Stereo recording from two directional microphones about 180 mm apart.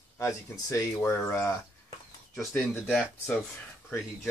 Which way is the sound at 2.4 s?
Centre (ahead or behind).